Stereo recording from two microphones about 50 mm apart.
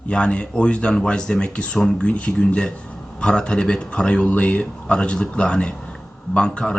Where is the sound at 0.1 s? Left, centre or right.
Left.